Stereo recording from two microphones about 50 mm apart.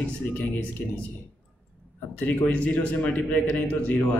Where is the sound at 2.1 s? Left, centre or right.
Left.